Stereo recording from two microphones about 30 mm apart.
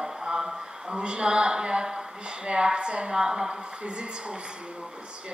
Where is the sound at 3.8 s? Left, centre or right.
Right.